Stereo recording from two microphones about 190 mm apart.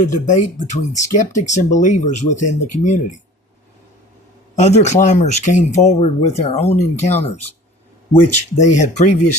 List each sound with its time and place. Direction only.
0.0 s speech: 40° left (ahead or behind)
4.5 s speech: 35° left (ahead or behind)